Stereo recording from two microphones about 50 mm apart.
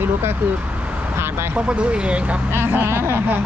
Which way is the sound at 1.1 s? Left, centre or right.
Right.